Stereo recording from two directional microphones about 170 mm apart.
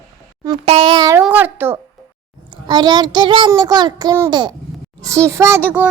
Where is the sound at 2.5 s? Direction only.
25° right (ahead or behind).